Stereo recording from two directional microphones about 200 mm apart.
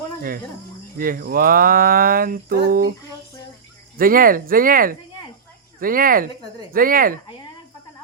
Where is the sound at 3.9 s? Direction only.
45° right (ahead or behind).